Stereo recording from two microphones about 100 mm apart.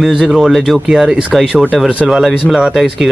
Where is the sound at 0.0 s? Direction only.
5° right (ahead or behind).